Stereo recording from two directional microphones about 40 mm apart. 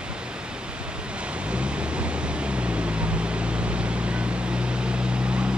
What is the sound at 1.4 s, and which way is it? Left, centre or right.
Vehicle, right.